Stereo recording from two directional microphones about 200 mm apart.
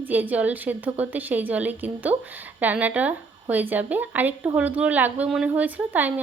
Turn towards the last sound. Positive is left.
turn(degrees=-10)  # may be behind; listen again after turning